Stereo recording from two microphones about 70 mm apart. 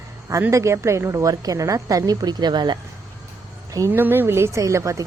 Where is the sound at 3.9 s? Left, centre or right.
Right.